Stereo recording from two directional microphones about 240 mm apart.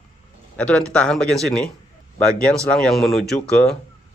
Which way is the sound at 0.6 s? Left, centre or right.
Centre.